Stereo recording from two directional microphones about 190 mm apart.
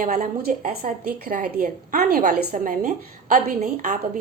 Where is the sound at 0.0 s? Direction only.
50° right (ahead or behind).